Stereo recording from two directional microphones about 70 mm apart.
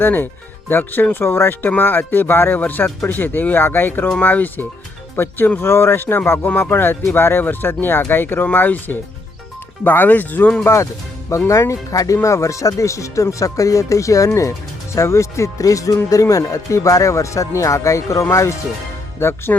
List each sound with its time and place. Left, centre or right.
0.0 s speech: left
10.6 s speech: left